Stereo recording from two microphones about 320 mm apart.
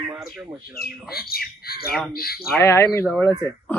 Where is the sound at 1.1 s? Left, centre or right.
Left.